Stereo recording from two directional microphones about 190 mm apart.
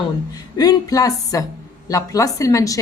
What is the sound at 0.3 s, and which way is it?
A woman's voice, 20° left (ahead or behind).